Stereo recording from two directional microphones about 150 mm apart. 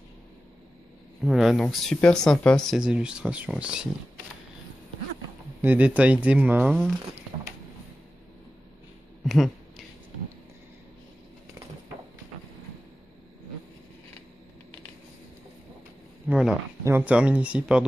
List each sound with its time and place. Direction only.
1.2 s speech: centre (ahead or behind)
5.6 s speech: 10° right (ahead or behind)
9.2 s a sound: centre (ahead or behind)
16.3 s speech: 5° right (ahead or behind)